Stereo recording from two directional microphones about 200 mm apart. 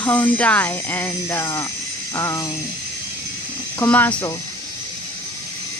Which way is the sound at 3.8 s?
10° left (ahead or behind).